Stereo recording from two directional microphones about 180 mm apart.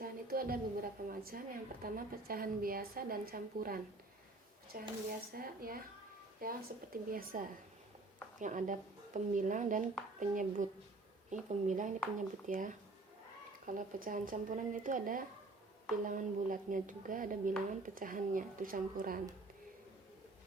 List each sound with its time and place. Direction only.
0.0 s a woman's voice: 55° right (ahead or behind)